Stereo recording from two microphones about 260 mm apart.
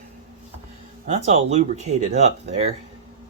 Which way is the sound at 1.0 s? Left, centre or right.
Right.